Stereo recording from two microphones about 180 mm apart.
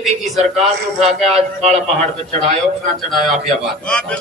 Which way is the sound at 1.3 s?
35° right (ahead or behind).